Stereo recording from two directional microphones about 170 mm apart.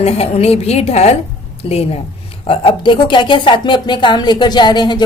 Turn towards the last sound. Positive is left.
turn(degrees=25)  # may be behind; listen again after turning